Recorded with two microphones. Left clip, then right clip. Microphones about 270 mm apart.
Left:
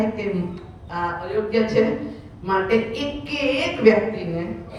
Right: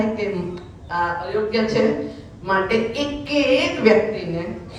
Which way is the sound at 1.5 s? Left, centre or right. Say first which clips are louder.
Left 1 dB; centre.